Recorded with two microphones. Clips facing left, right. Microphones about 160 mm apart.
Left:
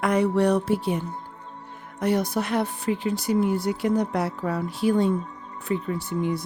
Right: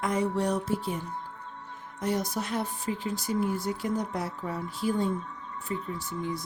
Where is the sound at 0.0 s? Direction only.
70° left (ahead or behind).